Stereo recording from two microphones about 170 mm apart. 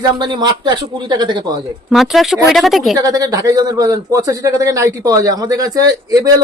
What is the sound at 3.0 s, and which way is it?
A man's voice, 20° right (ahead or behind).